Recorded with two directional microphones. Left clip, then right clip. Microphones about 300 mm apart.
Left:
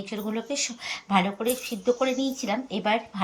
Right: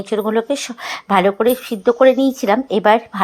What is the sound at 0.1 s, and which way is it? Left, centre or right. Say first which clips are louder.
Speech: right 16 dB; right.